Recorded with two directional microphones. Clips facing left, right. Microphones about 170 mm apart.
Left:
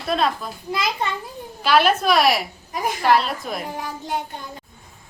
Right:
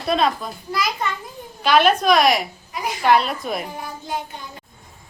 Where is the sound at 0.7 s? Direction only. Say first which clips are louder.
Even; 25° left (ahead or behind).